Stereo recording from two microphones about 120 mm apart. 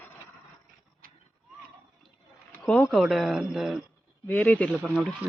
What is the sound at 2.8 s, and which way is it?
Speech, centre (ahead or behind).